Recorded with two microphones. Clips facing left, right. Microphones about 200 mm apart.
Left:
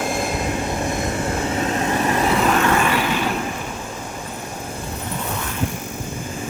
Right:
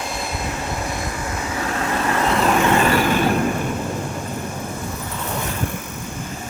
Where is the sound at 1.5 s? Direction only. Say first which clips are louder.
Even; 20° left (ahead or behind).